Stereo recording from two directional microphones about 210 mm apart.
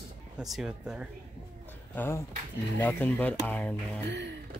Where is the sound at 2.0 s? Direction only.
10° left (ahead or behind).